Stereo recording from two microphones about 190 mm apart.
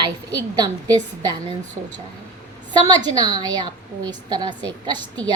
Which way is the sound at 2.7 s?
20° right (ahead or behind).